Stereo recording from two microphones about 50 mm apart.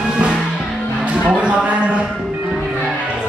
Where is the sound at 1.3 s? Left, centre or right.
Right.